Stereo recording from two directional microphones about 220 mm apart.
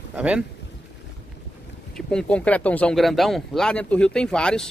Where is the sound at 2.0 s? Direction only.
5° left (ahead or behind).